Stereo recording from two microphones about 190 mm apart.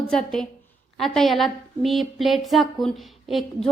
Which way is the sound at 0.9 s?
Centre (ahead or behind).